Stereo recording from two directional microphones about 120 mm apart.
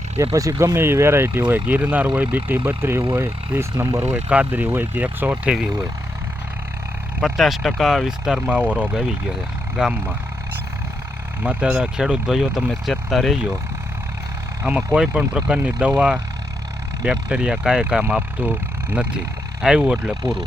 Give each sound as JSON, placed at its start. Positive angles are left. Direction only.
{"t": 0.3, "sound": "speech", "side_deg": -25}
{"t": 7.2, "sound": "speech", "side_deg": 0}
{"t": 11.4, "sound": "speech", "side_deg": -10}
{"t": 14.9, "sound": "speech", "side_deg": -10}
{"t": 19.6, "sound": "speech", "side_deg": -5}